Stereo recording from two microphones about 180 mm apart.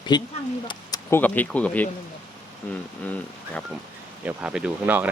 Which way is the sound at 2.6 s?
10° left (ahead or behind).